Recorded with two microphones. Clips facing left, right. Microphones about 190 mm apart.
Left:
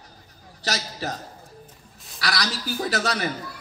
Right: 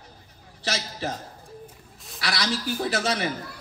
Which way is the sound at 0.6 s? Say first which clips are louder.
Even; 40° left (ahead or behind).